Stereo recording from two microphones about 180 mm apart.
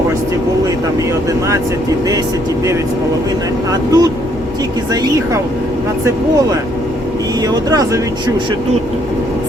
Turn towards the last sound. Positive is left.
turn(degrees=-20)  # may be behind; listen again after turning